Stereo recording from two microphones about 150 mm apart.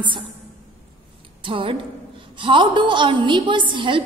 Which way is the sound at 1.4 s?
35° right (ahead or behind).